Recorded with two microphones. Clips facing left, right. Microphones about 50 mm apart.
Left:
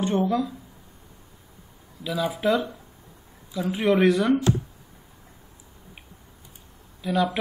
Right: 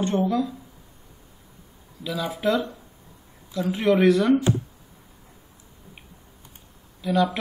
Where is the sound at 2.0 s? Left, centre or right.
Centre.